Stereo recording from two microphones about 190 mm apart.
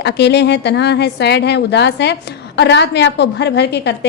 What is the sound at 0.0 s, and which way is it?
A woman's voice, 60° left (ahead or behind).